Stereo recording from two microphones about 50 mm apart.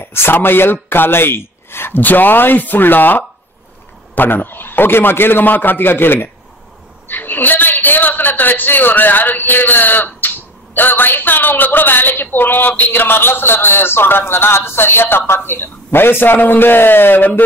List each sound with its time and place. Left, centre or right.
0.0 s a man's voice: left
12.9 s a man's voice: left